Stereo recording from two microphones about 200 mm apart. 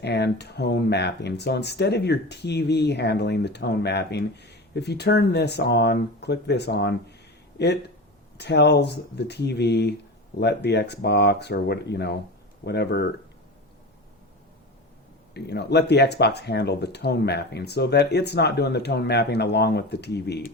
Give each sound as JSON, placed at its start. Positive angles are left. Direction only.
{"t": 0.0, "sound": "speech", "side_deg": 55}
{"t": 8.4, "sound": "speech", "side_deg": 55}
{"t": 15.3, "sound": "speech", "side_deg": 55}